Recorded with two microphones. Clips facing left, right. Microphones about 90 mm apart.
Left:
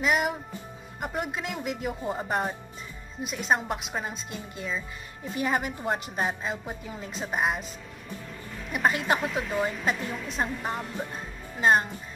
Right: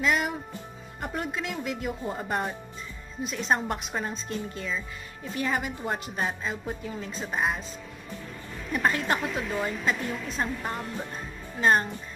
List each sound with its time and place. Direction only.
0.0 s music: 15° left (ahead or behind)
1.0 s a woman's voice: 15° left (ahead or behind)
2.0 s a woman's voice: 5° left (ahead or behind)
5.4 s a woman's voice: 25° left (ahead or behind)
8.7 s a woman's voice: 15° left (ahead or behind)